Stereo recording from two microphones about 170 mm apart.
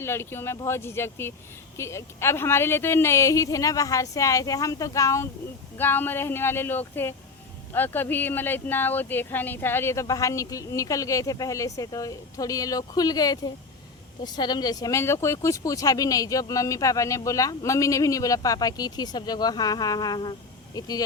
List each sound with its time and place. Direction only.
0.0 s speech: 15° left (ahead or behind)